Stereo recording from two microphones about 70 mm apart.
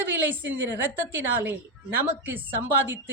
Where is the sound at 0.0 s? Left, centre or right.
Right.